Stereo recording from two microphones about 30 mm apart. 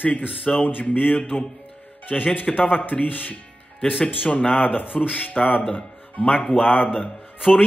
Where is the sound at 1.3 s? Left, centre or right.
Left.